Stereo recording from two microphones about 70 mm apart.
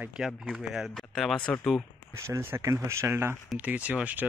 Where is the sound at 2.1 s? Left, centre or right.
Right.